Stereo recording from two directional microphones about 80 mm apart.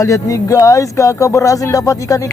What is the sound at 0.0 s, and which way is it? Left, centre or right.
Speech, left.